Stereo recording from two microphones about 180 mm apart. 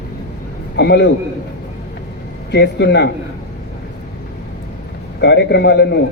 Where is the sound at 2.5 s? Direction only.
70° left (ahead or behind).